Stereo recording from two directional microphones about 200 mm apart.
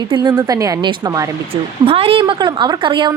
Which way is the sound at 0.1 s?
20° right (ahead or behind).